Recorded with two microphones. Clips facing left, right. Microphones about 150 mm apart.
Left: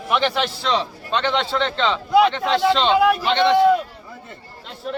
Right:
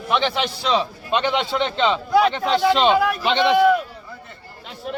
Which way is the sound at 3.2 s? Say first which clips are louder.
Left 1 dB; 15° right (ahead or behind).